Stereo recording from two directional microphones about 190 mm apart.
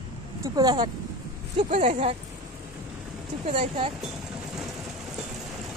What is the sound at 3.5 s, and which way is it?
Speech, 30° right (ahead or behind).